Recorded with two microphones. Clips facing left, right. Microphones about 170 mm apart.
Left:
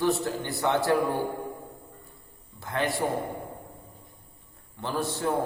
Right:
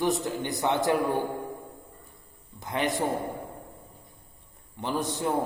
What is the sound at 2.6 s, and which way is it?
Speech, 20° right (ahead or behind).